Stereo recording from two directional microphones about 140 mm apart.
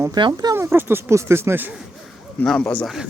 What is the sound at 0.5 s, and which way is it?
Speech, 15° right (ahead or behind).